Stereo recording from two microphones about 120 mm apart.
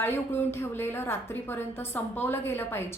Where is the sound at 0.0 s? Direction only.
20° left (ahead or behind).